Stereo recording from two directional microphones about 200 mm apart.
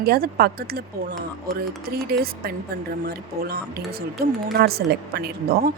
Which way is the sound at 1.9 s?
50° right (ahead or behind).